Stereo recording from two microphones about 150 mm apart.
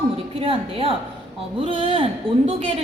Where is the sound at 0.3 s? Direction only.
40° right (ahead or behind).